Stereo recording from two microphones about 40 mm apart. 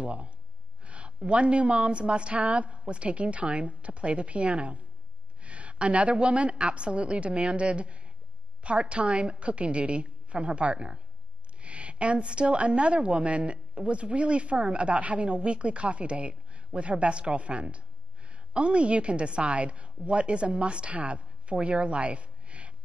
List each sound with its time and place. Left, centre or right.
0.0 s a woman's voice: right